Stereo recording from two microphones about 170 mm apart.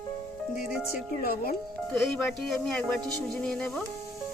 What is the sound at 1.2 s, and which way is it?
Speech, 60° left (ahead or behind).